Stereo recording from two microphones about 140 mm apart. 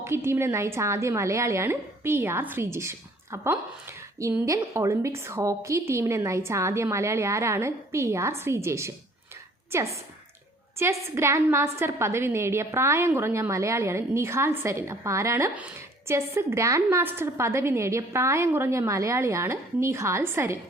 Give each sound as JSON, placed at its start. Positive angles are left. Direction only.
{"t": 0.0, "sound": "a woman's voice", "side_deg": -20}